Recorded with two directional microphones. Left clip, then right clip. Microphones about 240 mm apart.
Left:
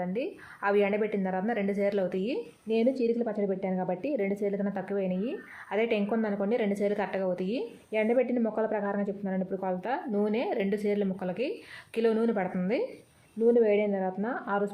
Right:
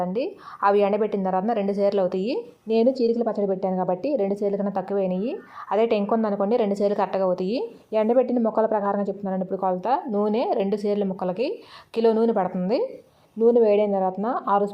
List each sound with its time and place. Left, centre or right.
0.0 s a woman's voice: centre
5.1 s speech: centre
5.7 s a woman's voice: centre